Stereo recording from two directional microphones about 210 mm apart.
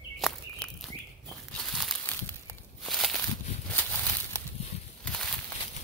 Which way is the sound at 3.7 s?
10° left (ahead or behind).